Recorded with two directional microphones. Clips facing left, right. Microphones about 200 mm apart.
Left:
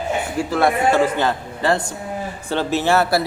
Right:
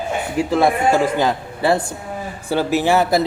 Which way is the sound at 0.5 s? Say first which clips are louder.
Right 1 dB; 15° right (ahead or behind).